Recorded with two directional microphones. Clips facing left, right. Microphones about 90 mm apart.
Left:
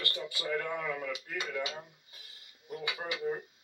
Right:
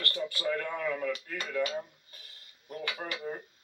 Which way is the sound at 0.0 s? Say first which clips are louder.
Right 5 dB; 15° left (ahead or behind).